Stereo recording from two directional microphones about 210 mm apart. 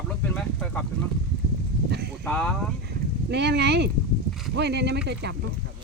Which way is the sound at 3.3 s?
55° right (ahead or behind).